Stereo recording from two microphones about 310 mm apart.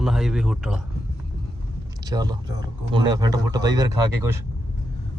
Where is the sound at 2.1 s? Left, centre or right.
Centre.